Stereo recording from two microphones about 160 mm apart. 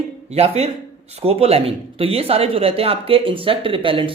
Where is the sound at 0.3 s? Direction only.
40° right (ahead or behind).